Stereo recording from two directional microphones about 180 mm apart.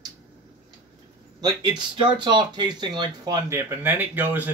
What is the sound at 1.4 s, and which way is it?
Speech, 25° right (ahead or behind).